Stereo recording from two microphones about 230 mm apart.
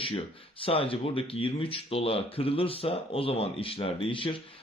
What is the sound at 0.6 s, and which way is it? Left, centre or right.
Speech, left.